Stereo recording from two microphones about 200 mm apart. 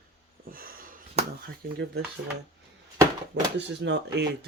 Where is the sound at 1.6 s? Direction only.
50° right (ahead or behind).